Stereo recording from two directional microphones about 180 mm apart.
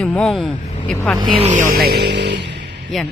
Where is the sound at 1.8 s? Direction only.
65° right (ahead or behind).